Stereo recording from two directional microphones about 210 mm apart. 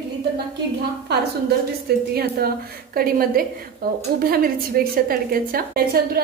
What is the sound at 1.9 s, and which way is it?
A woman's voice, 50° right (ahead or behind).